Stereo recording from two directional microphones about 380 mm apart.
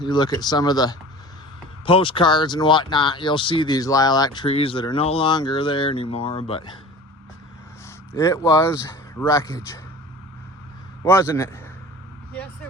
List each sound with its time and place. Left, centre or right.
0.0 s speech: centre
8.1 s speech: centre
11.0 s speech: centre